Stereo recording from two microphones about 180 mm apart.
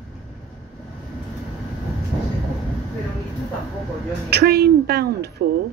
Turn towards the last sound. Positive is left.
turn(degrees=-60)  # may be behind; listen again after turning